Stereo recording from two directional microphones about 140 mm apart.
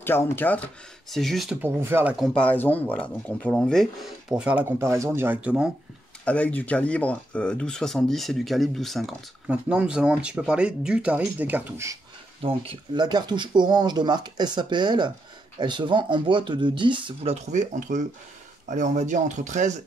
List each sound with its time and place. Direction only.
0.0 s speech: 15° left (ahead or behind)
1.1 s speech: centre (ahead or behind)
1.6 s speech: 15° right (ahead or behind)
2.1 s speech: centre (ahead or behind)
2.4 s speech: 10° left (ahead or behind); by 5.7 s 10° right (ahead or behind)
6.2 s speech: 10° left (ahead or behind); by 11.9 s 15° right (ahead or behind)
12.4 s speech: 40° right (ahead or behind); by 19.8 s 60° right (ahead or behind)